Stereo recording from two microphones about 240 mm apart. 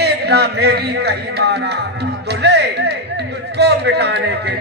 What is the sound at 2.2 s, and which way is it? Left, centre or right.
Music, right.